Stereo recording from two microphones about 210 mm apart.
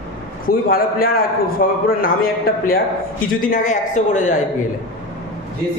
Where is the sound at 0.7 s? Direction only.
45° left (ahead or behind).